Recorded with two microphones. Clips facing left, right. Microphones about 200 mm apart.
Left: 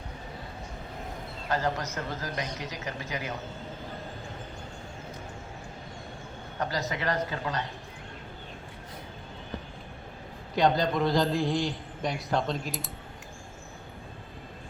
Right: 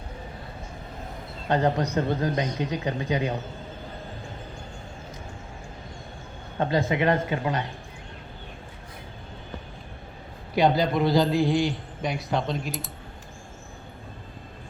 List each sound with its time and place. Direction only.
1.5 s a man's voice: 35° right (ahead or behind)
6.6 s a man's voice: 25° right (ahead or behind)
10.5 s a man's voice: 10° right (ahead or behind)